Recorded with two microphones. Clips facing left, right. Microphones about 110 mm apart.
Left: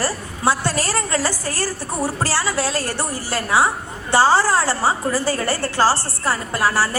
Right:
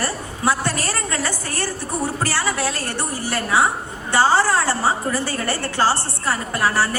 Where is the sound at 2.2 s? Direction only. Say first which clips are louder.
Left 1 dB; 30° left (ahead or behind).